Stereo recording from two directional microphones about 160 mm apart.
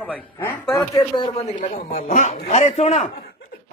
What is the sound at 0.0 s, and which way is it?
A man's voice, 10° left (ahead or behind).